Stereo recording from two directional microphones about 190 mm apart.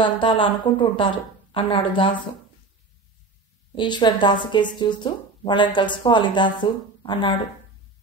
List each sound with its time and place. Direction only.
0.0 s speech: 25° left (ahead or behind)
3.7 s speech: 25° left (ahead or behind)